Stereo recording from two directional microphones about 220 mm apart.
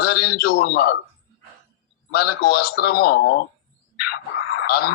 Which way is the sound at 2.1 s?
45° left (ahead or behind).